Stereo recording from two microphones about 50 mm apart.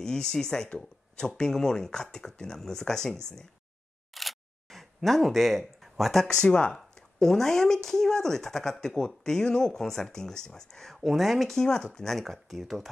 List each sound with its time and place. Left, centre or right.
0.0 s speech: centre
4.1 s camera: centre
6.2 s speech: centre
7.2 s speech: centre